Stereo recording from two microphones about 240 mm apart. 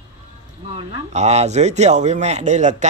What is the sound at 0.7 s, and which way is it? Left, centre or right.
Speech, right.